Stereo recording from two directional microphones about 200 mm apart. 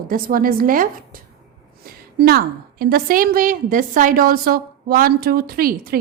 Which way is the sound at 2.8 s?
45° right (ahead or behind).